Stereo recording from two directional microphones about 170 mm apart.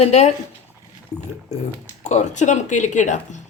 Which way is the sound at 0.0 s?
40° left (ahead or behind).